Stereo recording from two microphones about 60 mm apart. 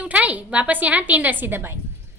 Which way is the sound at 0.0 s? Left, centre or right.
Right.